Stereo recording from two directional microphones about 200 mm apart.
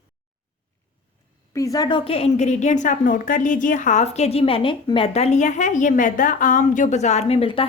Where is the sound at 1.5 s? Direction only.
15° left (ahead or behind).